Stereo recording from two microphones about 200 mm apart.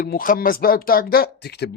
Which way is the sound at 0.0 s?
45° left (ahead or behind).